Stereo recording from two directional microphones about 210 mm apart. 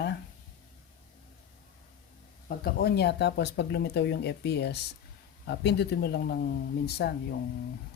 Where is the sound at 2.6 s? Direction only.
45° left (ahead or behind).